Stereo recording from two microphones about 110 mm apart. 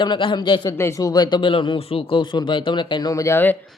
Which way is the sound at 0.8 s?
30° left (ahead or behind).